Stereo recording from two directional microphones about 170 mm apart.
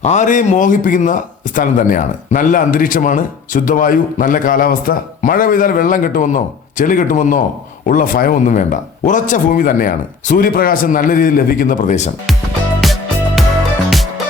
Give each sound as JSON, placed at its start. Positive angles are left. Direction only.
{"t": 0.0, "sound": "speech", "side_deg": 45}
{"t": 12.8, "sound": "music", "side_deg": 0}